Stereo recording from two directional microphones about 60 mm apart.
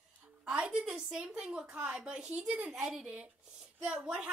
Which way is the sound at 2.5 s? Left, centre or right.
Right.